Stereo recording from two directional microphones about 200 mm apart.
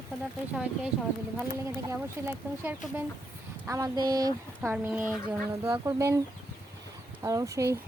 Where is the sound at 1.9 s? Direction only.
10° right (ahead or behind).